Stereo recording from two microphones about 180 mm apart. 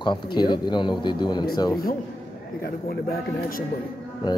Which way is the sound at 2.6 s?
55° left (ahead or behind).